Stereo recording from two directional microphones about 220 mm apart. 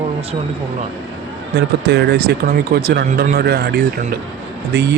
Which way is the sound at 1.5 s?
50° right (ahead or behind).